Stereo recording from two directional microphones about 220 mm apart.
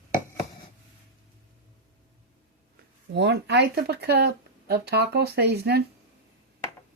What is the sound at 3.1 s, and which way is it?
Speech, 50° right (ahead or behind).